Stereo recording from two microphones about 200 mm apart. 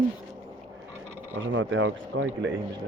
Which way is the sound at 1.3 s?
80° right.